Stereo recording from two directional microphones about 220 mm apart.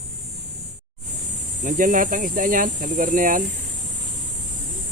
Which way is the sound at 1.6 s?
40° right (ahead or behind).